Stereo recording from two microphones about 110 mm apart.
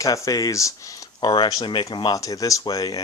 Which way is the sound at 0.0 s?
30° left (ahead or behind).